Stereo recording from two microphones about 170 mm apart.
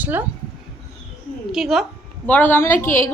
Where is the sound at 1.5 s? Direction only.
Centre (ahead or behind).